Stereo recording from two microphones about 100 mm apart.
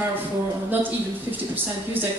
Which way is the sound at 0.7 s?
20° right (ahead or behind).